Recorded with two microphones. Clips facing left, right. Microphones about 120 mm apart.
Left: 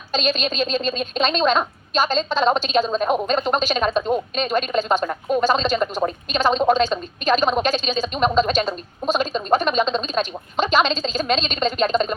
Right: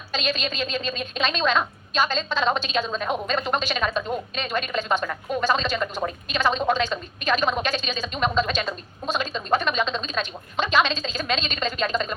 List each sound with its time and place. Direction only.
0.1 s a woman's voice: 35° left (ahead or behind)